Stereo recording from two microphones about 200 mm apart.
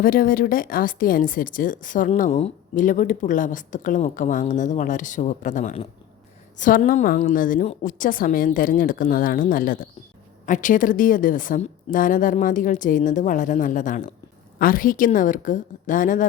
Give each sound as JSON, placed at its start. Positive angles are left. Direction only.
{"t": 0.0, "sound": "a woman's voice", "side_deg": 45}